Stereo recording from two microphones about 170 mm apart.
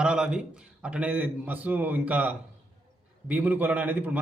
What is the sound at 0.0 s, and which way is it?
A man's voice, 5° right (ahead or behind).